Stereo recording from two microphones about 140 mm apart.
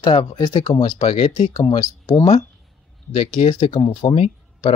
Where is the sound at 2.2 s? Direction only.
45° left (ahead or behind).